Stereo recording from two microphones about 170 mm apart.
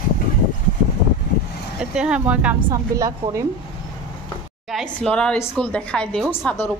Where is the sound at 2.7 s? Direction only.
20° right (ahead or behind).